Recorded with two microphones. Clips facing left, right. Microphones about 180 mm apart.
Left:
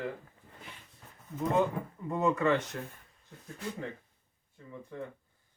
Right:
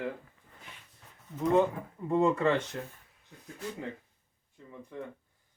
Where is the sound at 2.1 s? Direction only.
30° right (ahead or behind).